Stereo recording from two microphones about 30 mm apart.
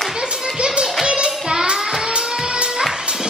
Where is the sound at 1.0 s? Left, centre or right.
Right.